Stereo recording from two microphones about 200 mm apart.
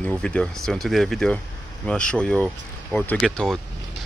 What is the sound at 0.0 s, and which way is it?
Speech, 5° left (ahead or behind).